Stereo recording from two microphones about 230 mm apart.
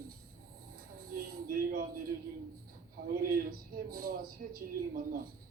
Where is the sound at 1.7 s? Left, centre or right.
Right.